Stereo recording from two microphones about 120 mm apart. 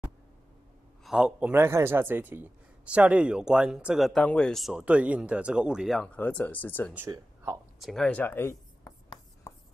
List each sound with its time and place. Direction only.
1.0 s a man's voice: 5° right (ahead or behind)
1.5 s a man's voice: 20° right (ahead or behind)
5.9 s speech: 10° left (ahead or behind)
7.1 s speech: 30° right (ahead or behind)
7.8 s speech: 5° left (ahead or behind); by 8.9 s 20° left (ahead or behind)